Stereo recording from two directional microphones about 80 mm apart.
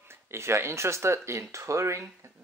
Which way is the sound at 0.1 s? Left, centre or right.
Right.